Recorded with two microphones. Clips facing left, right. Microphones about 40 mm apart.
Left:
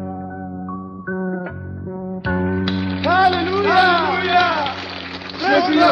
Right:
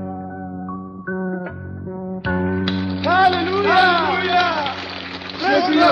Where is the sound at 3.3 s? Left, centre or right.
Centre.